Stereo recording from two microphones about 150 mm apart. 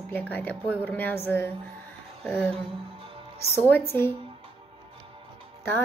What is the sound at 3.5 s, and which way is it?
Speech, 15° left (ahead or behind).